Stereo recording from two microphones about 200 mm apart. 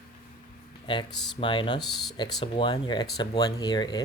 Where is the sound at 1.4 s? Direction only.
25° left (ahead or behind).